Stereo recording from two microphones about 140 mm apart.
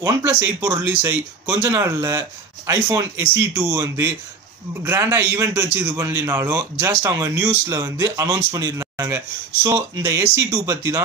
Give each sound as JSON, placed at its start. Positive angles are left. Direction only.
{"t": 0.0, "sound": "a man's voice", "side_deg": -15}